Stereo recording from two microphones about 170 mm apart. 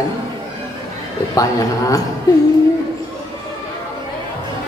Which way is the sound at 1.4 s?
20° left (ahead or behind).